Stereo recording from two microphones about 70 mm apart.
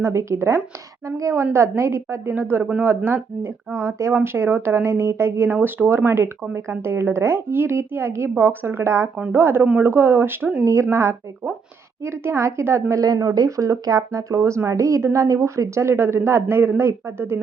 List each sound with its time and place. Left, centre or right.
0.0 s a woman's voice: right
2.3 s a woman's voice: right
10.6 s a woman's voice: right
13.3 s speech: right